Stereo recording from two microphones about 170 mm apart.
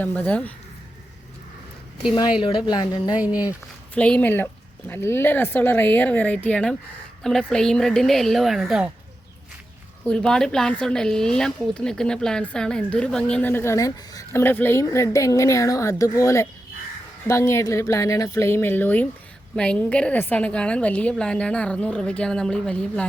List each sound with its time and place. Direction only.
0.0 s speech: 10° left (ahead or behind)
2.4 s a woman's voice: 25° left (ahead or behind)
3.9 s a woman's voice: 5° left (ahead or behind)
10.0 s speech: 5° left (ahead or behind)